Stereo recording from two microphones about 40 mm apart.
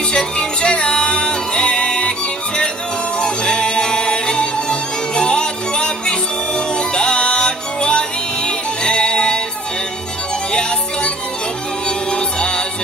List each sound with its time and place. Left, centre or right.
0.1 s music: left
12.1 s music: left